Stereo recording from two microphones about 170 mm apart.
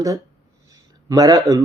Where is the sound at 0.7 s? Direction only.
20° right (ahead or behind).